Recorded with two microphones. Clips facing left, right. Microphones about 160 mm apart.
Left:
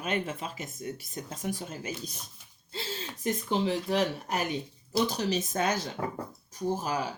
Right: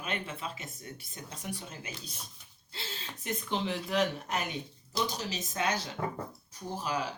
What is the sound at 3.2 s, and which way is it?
Speech, 35° left (ahead or behind).